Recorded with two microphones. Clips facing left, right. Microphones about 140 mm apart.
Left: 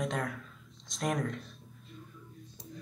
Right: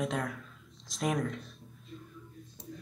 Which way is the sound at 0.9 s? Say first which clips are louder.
Right 1 dB; centre (ahead or behind).